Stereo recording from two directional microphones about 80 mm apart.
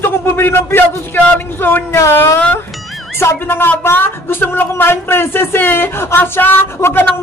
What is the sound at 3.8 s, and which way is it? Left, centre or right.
Speech, left.